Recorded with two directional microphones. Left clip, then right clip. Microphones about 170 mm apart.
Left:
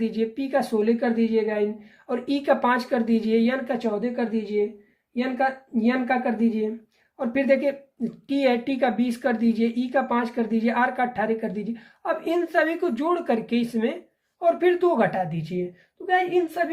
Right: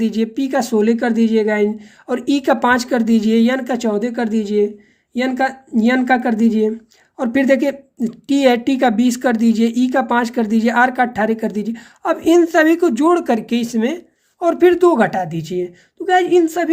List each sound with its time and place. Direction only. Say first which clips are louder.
0.0 s a woman's voice: right 6 dB; 55° right (ahead or behind)